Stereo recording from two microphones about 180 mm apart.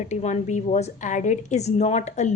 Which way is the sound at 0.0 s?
40° left (ahead or behind).